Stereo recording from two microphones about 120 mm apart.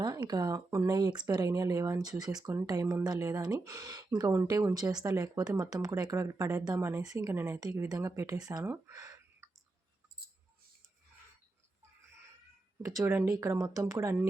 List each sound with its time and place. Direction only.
0.0 s speech: 35° right (ahead or behind)
8.7 s a sound: 25° right (ahead or behind)
12.8 s speech: 25° right (ahead or behind)